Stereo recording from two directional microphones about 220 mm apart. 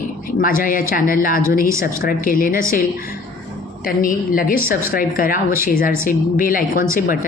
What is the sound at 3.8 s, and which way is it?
Speech, 40° left (ahead or behind).